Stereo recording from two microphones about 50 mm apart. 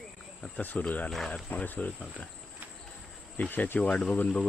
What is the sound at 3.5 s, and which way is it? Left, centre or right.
Speech, left.